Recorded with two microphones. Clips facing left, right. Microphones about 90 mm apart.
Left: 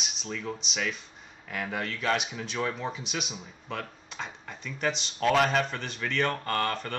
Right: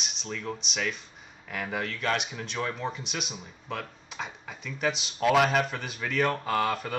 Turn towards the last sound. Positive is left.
turn(degrees=-5)  # may be behind; listen again after turning